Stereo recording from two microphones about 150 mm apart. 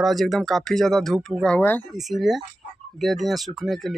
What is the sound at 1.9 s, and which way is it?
Speech, centre (ahead or behind).